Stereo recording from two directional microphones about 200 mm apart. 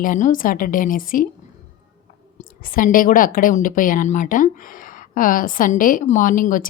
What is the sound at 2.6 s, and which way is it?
A woman's voice, 45° left (ahead or behind).